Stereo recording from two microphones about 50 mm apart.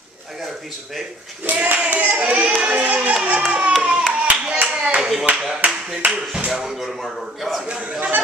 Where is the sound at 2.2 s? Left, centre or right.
Right.